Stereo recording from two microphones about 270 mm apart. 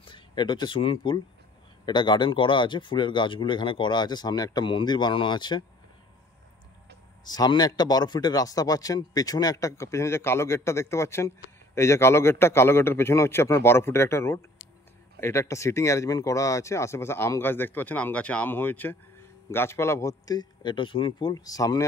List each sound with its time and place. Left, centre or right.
0.0 s speech: centre
7.2 s speech: centre